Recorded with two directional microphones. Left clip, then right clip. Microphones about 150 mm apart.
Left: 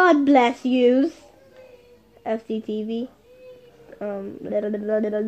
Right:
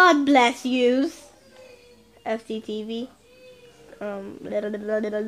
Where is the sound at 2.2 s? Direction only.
15° left (ahead or behind).